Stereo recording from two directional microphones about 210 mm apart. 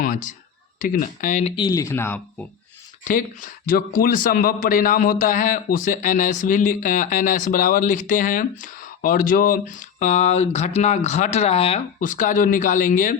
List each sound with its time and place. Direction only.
0.0 s a man's voice: 40° left (ahead or behind)
1.5 s speech: 20° left (ahead or behind)
3.0 s a man's voice: 40° left (ahead or behind)